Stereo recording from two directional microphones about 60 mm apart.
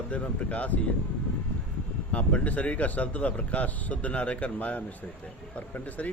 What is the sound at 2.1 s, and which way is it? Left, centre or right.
Speech, left.